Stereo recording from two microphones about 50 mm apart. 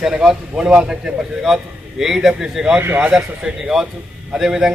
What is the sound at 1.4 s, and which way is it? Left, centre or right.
A man's voice, centre.